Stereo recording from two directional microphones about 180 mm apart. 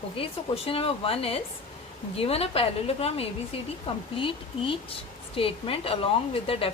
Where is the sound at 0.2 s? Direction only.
35° left (ahead or behind).